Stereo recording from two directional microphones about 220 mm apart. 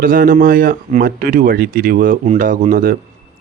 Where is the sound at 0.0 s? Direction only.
40° right (ahead or behind).